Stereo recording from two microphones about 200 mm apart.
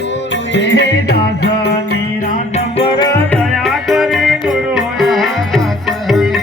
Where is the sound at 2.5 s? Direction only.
25° left (ahead or behind).